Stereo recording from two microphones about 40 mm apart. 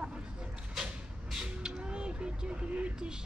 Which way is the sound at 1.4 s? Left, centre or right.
Centre.